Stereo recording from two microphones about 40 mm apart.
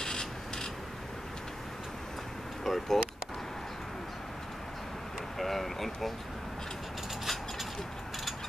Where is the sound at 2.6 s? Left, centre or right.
Centre.